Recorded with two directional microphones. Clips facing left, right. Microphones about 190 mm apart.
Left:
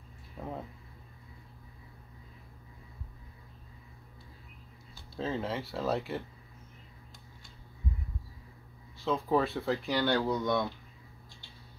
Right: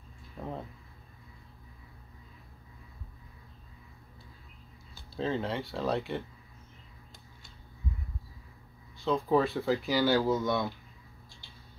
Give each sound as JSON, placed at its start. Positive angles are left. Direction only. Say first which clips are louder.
{"t": 0.4, "sound": "a sound", "louder": "right 1 dB", "side_deg": 5}
{"t": 5.1, "sound": "speech", "louder": "right 2 dB", "side_deg": 0}
{"t": 8.9, "sound": "speech", "louder": "right 2 dB", "side_deg": 0}